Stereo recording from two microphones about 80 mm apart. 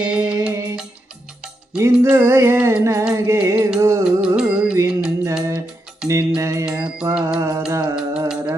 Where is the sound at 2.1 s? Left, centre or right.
Right.